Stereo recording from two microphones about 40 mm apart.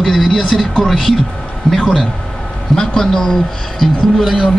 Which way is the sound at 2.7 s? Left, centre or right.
Centre.